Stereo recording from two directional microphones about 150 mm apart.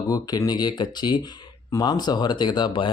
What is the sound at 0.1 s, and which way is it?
Speech, 25° left (ahead or behind).